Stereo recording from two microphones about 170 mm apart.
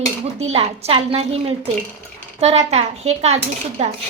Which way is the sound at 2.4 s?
40° right (ahead or behind).